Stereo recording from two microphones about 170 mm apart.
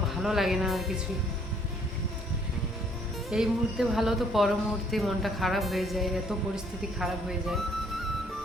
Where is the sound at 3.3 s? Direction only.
Centre (ahead or behind).